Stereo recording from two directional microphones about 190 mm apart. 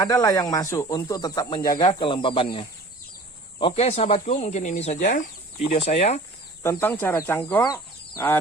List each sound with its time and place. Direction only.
0.0 s speech: 20° left (ahead or behind); by 6.2 s 35° left (ahead or behind)
6.6 s speech: 10° left (ahead or behind)